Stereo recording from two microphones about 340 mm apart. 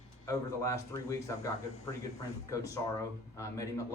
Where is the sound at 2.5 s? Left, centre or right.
Centre.